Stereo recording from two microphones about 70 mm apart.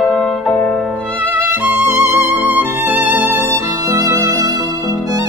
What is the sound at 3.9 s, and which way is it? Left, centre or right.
Music, right.